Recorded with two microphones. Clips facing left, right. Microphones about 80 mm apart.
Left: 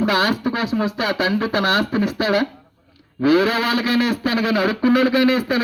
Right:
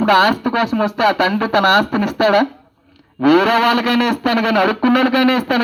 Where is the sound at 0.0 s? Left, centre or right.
Right.